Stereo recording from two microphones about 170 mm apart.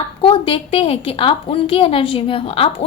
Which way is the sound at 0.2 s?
30° left (ahead or behind).